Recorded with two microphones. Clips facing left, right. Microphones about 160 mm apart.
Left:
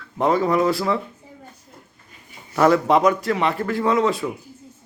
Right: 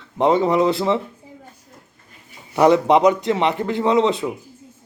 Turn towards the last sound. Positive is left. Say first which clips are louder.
# right 2 dB
turn(degrees=-20)  # may be behind; listen again after turning